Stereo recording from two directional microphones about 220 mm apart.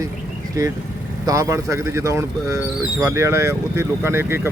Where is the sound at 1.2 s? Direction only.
15° right (ahead or behind).